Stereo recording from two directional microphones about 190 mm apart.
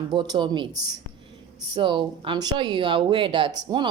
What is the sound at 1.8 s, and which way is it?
Speech, 25° right (ahead or behind).